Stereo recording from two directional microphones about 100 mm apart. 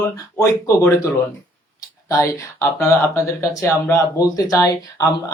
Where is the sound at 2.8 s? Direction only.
30° left (ahead or behind).